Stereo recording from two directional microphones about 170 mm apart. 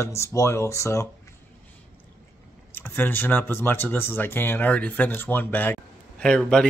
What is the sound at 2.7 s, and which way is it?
Speech, 15° left (ahead or behind).